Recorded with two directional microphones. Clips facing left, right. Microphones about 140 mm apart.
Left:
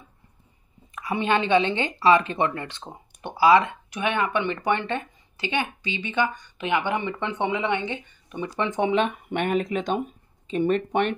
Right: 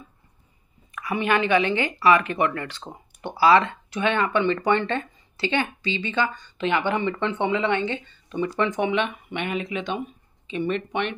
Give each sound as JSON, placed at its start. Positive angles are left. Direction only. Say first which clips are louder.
{"t": 0.9, "sound": "a woman's voice", "louder": "even", "side_deg": 25}
{"t": 8.9, "sound": "speech", "louder": "left 2 dB", "side_deg": 45}